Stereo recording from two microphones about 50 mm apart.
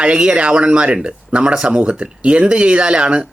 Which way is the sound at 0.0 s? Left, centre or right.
Centre.